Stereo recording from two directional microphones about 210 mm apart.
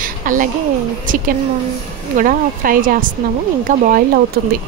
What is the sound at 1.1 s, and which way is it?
A woman's voice, 40° right (ahead or behind).